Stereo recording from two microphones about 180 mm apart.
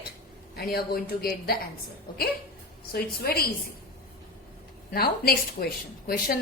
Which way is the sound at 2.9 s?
60° left (ahead or behind).